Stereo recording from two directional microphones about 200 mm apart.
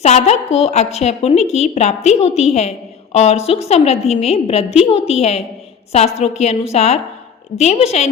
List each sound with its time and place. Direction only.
0.0 s a woman's voice: 35° left (ahead or behind)